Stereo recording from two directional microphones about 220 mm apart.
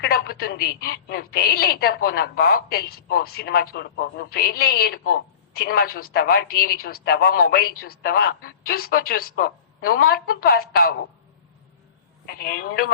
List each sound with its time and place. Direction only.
0.0 s a woman's voice: 45° left (ahead or behind)
12.2 s a woman's voice: 40° left (ahead or behind)